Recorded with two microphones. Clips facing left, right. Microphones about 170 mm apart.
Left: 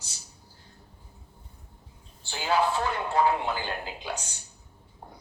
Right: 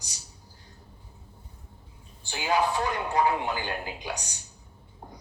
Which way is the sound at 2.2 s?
15° right (ahead or behind).